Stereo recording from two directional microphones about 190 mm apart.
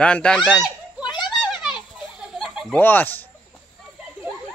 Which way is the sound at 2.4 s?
Centre (ahead or behind).